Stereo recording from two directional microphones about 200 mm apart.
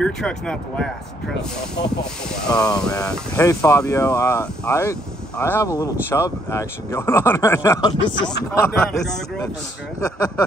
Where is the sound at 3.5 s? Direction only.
15° left (ahead or behind).